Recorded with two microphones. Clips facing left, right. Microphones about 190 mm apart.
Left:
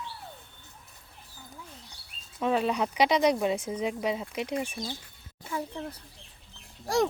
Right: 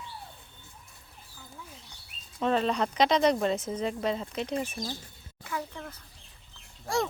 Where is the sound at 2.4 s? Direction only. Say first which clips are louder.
Even; 10° left (ahead or behind).